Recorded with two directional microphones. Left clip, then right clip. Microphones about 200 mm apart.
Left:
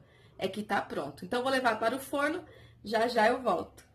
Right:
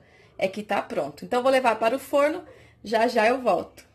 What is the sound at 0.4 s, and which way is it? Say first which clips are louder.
Speech: right 6 dB; 20° right (ahead or behind).